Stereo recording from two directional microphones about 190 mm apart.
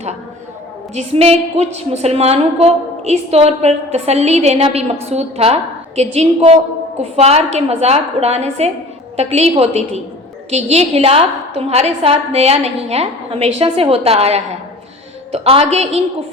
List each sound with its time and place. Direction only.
0.9 s a woman's voice: 35° right (ahead or behind)